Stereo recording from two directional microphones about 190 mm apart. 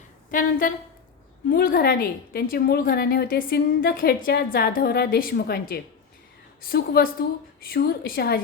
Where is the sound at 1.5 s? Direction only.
50° left (ahead or behind).